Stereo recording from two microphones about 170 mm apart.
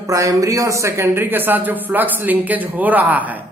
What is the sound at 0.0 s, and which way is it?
Speech, 20° right (ahead or behind).